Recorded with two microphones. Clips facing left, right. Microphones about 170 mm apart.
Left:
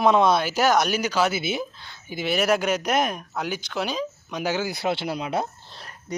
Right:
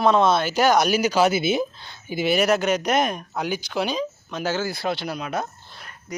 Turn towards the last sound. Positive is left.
turn(degrees=30)  # may be behind; listen again after turning